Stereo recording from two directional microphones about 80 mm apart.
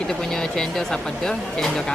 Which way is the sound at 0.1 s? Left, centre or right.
Centre.